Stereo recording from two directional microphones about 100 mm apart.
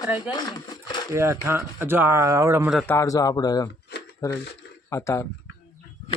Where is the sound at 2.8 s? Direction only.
30° left (ahead or behind).